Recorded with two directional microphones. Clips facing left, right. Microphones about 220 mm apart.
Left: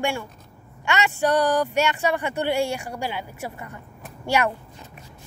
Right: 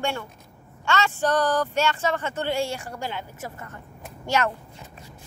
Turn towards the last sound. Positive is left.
turn(degrees=15)  # may be behind; listen again after turning